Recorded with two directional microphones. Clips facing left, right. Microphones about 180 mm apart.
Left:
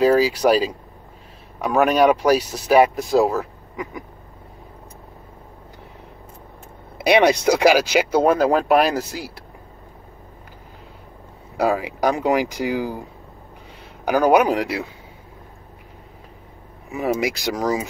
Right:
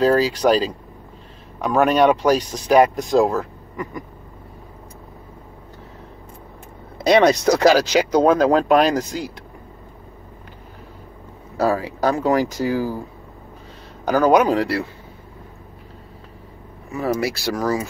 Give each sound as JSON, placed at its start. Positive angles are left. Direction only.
{"t": 0.0, "sound": "speech", "side_deg": 10}
{"t": 7.0, "sound": "speech", "side_deg": 10}
{"t": 11.5, "sound": "speech", "side_deg": 15}
{"t": 14.0, "sound": "speech", "side_deg": 10}
{"t": 16.9, "sound": "speech", "side_deg": 15}